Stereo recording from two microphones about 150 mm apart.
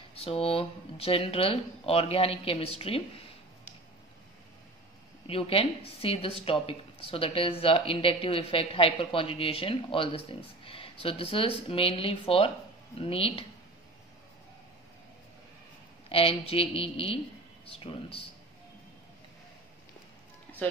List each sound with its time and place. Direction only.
0.2 s speech: 40° left (ahead or behind)
5.2 s speech: 40° left (ahead or behind)
16.1 s speech: 40° left (ahead or behind)
20.6 s speech: 10° left (ahead or behind)